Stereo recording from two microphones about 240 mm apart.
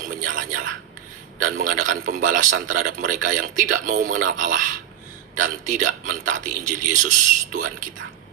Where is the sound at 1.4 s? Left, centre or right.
Right.